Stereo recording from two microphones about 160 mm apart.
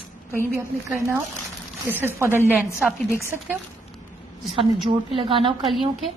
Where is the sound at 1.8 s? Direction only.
15° right (ahead or behind).